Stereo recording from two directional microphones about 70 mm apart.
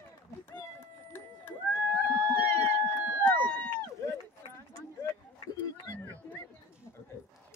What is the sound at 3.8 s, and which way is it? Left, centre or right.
Run, left.